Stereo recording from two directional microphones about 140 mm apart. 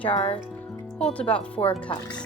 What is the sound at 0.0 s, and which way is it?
Speech, 40° left (ahead or behind).